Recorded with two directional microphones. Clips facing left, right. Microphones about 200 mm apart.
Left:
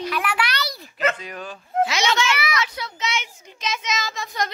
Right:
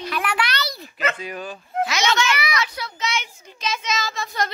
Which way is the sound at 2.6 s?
20° left (ahead or behind).